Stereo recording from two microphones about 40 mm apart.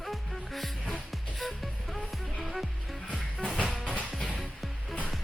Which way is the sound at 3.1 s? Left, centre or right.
Centre.